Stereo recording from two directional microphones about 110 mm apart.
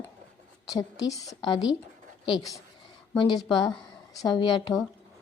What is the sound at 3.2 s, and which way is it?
A woman's voice, 40° left (ahead or behind).